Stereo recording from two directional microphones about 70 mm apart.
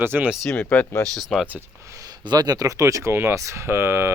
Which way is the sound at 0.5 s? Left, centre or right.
Left.